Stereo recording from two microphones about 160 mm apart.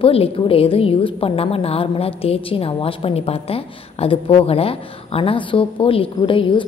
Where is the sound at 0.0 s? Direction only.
35° left (ahead or behind).